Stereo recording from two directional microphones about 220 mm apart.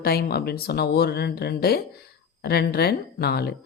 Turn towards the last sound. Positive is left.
turn(degrees=45)  # may be behind; listen again after turning